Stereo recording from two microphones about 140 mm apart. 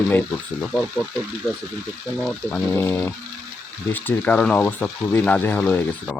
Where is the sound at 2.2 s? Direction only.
10° left (ahead or behind).